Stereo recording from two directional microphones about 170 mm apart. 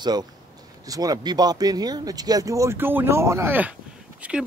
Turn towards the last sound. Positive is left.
turn(degrees=-5)  # may be behind; listen again after turning